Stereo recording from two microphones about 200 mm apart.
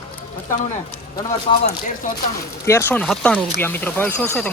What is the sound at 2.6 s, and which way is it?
Speech, 10° left (ahead or behind).